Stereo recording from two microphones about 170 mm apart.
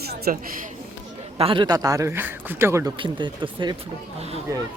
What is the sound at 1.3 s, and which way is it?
A man's voice, 30° right (ahead or behind).